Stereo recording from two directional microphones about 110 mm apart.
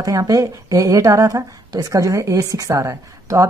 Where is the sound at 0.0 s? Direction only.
30° right (ahead or behind).